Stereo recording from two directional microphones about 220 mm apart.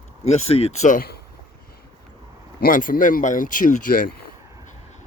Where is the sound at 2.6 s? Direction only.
40° left (ahead or behind).